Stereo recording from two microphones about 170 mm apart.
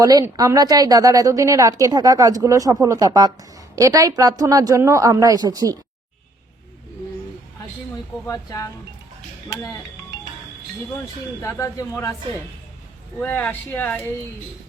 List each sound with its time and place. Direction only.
0.0 s a woman's voice: 20° right (ahead or behind)
8.3 s speech: 20° left (ahead or behind)
11.0 s speech: 15° left (ahead or behind)
13.1 s speech: 10° left (ahead or behind)